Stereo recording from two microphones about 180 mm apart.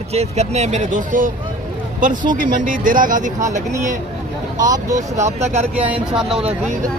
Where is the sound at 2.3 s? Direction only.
50° right (ahead or behind).